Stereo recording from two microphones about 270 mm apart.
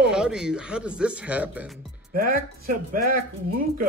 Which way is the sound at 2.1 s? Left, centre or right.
Right.